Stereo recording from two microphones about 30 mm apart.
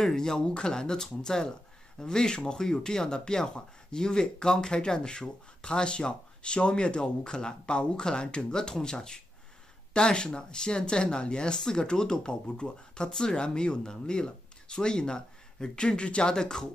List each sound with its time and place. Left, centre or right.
0.0 s speech: centre